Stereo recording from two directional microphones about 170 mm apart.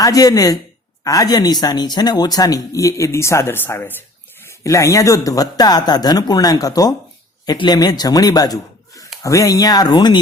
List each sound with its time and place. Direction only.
0.0 s speech: 20° left (ahead or behind)